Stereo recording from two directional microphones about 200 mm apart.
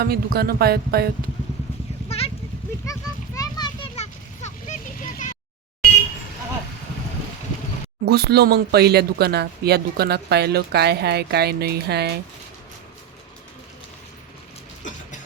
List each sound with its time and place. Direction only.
0.0 s speech: 50° right (ahead or behind)
2.0 s vehicle: 30° left (ahead or behind)
2.8 s children playing: 15° left (ahead or behind)
3.9 s vehicle: 35° left (ahead or behind)
8.0 s speech: 50° right (ahead or behind)